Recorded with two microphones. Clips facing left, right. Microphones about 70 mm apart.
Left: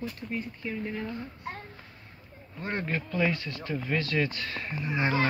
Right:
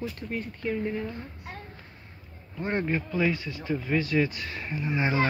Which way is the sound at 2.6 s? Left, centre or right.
Right.